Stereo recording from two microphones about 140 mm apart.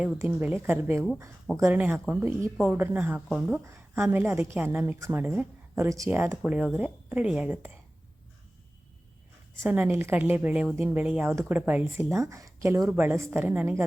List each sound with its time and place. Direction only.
0.2 s a woman's voice: 15° right (ahead or behind)
3.2 s speech: 5° right (ahead or behind)
3.5 s a woman's voice: 20° right (ahead or behind)
9.6 s a woman's voice: 15° right (ahead or behind)